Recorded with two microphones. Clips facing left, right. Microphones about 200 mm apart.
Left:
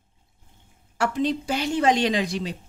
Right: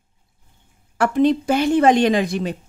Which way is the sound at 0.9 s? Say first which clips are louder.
Right 7 dB; 55° right (ahead or behind).